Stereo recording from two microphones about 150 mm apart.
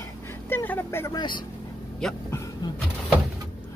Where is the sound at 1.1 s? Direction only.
30° left (ahead or behind).